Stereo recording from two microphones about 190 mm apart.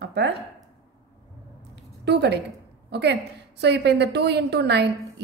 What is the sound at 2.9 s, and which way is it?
A woman's voice, 60° right (ahead or behind).